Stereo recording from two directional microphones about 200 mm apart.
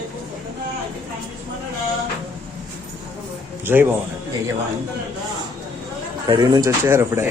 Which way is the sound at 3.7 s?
10° right (ahead or behind).